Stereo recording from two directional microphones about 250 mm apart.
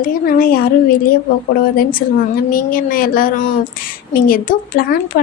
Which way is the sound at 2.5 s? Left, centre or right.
Left.